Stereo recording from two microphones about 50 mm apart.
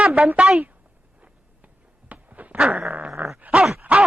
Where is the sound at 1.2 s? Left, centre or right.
Right.